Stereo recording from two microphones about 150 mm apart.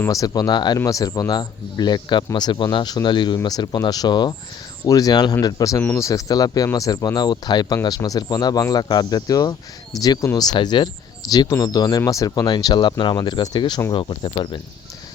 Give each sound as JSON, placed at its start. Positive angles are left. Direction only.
{"t": 0.0, "sound": "speech", "side_deg": 25}